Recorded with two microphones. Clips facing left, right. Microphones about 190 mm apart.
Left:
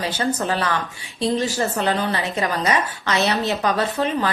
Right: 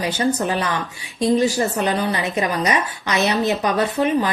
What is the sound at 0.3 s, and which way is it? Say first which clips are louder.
Speech: right 1 dB; 15° right (ahead or behind).